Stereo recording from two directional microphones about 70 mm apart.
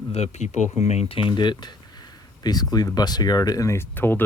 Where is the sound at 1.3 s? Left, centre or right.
Left.